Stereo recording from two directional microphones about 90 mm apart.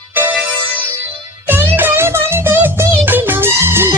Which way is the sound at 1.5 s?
20° right (ahead or behind).